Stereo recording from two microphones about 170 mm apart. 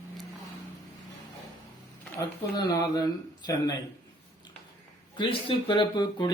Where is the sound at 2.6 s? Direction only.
20° left (ahead or behind).